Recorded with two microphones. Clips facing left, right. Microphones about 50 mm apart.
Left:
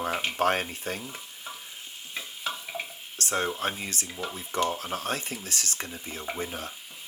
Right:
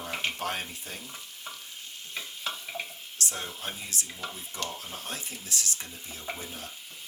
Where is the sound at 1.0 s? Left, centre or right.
Left.